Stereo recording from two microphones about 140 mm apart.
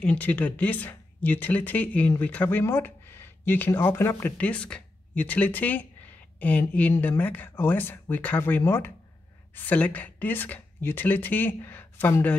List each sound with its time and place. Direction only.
0.0 s speech: 10° left (ahead or behind)